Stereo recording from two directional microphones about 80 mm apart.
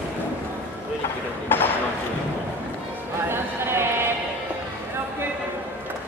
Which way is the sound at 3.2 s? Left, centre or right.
Right.